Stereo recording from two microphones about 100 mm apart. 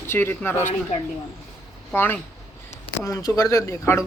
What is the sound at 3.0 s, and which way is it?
Speech, 35° left (ahead or behind).